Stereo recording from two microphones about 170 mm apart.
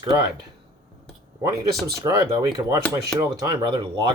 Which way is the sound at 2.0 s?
20° right (ahead or behind).